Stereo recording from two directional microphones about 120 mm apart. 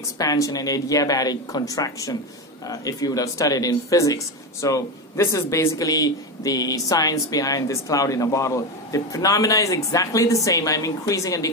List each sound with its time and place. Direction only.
0.2 s speech: 30° left (ahead or behind)